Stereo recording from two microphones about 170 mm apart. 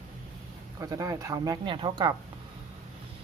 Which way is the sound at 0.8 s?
20° right (ahead or behind).